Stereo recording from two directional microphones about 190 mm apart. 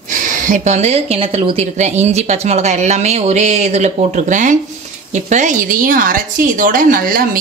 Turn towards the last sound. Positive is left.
turn(degrees=-45)  # may be behind; listen again after turning